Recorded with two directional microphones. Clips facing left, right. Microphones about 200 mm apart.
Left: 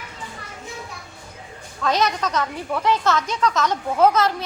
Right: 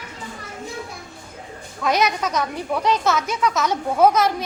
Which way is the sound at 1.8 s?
10° right (ahead or behind).